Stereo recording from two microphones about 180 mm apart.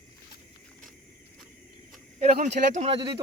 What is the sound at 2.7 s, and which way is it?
Speech, 35° right (ahead or behind).